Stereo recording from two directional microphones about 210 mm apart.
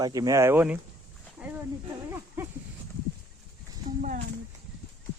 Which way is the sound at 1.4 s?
10° right (ahead or behind).